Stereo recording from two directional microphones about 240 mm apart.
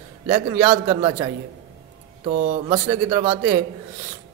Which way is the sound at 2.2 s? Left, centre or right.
Right.